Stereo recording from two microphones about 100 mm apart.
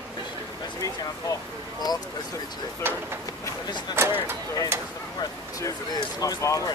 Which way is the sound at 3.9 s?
25° right (ahead or behind).